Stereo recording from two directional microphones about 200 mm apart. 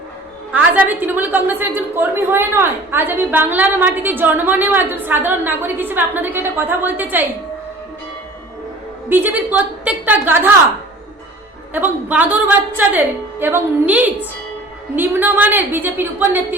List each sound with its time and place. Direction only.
0.5 s a woman's voice: 10° right (ahead or behind)
9.0 s a woman's voice: 10° right (ahead or behind)
11.7 s a woman's voice: 10° right (ahead or behind)